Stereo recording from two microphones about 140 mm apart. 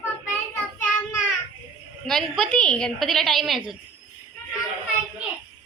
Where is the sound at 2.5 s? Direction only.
5° left (ahead or behind).